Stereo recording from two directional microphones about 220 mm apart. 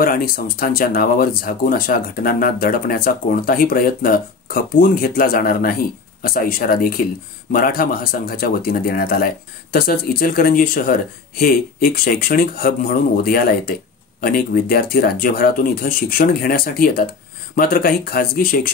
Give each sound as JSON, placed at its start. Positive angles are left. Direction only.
{"t": 0.0, "sound": "speech", "side_deg": 40}